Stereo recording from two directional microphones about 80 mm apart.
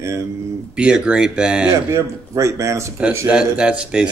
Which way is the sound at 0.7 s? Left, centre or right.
Centre.